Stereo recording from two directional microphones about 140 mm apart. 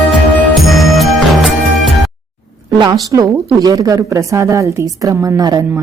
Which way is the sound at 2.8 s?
25° right (ahead or behind).